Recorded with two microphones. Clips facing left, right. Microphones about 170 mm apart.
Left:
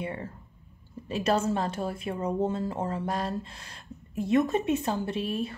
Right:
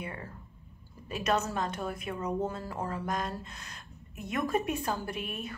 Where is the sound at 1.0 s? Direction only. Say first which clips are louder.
Left 4 dB; 30° left (ahead or behind).